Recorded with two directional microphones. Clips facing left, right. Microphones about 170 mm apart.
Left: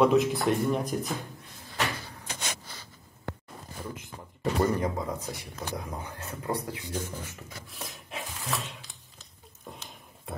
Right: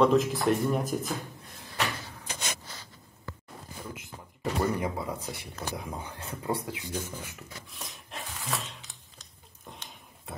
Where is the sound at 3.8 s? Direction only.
Centre (ahead or behind).